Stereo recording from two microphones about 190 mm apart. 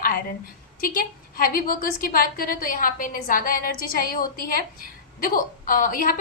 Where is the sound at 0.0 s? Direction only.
50° left (ahead or behind).